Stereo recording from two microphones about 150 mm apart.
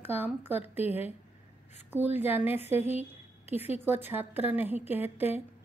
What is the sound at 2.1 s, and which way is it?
A woman's voice, 15° right (ahead or behind).